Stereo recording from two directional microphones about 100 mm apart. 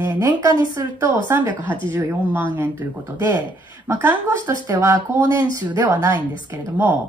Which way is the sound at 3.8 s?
25° right (ahead or behind).